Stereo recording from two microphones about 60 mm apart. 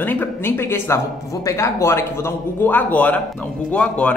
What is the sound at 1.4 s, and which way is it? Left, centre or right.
Speech, left.